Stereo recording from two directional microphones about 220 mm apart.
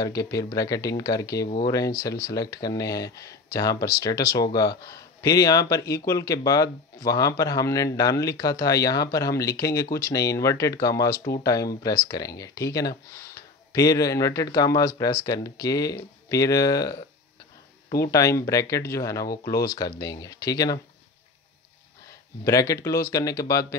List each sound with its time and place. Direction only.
0.0 s speech: 15° left (ahead or behind)
18.1 s speech: 15° left (ahead or behind)
22.4 s speech: 15° left (ahead or behind)